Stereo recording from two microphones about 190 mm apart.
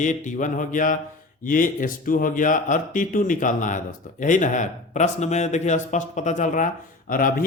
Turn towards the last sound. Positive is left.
turn(degrees=45)  # may be behind; listen again after turning